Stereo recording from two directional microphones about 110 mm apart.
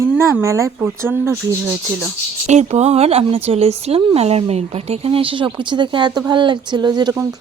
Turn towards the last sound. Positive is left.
turn(degrees=-40)  # may be behind; listen again after turning